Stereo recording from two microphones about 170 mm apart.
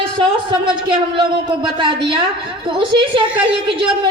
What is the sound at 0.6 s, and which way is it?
A man's voice, 30° right (ahead or behind).